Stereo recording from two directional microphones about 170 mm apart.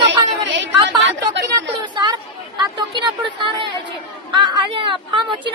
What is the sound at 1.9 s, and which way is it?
Chatter, 25° right (ahead or behind).